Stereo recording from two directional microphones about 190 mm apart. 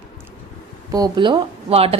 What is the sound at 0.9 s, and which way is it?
Speech, 20° right (ahead or behind).